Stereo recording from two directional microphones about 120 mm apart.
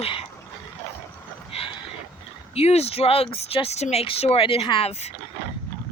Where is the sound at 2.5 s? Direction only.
60° left (ahead or behind).